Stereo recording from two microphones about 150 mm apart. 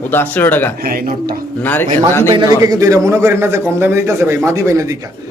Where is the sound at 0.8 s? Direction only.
75° right (ahead or behind).